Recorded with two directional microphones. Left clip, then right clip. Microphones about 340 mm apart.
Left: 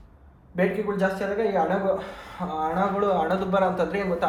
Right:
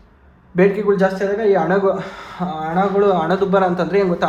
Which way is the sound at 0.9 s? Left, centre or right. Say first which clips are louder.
Right 12 dB; right.